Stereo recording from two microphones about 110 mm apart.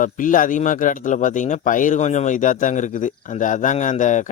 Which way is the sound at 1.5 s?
90° left.